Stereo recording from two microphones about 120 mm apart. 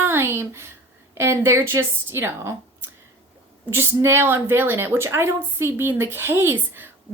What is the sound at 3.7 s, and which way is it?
A woman's voice, 20° right (ahead or behind).